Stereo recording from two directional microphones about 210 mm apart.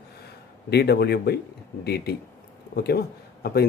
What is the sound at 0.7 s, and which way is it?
Speech, 50° left (ahead or behind).